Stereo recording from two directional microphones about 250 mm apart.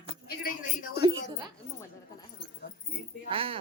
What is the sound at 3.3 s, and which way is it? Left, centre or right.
Speech, right.